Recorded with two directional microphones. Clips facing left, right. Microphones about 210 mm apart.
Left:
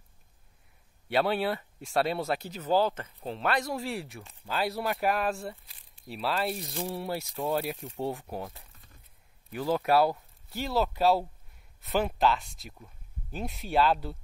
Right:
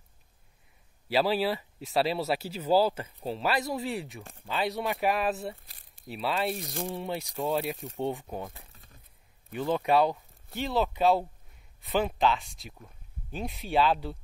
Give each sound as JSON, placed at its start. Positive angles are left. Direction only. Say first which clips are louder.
{"t": 1.0, "sound": "speech", "louder": "right 1 dB", "side_deg": 0}